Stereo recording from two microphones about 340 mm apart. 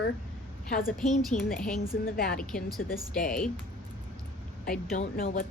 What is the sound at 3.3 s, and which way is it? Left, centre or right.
Speech, centre.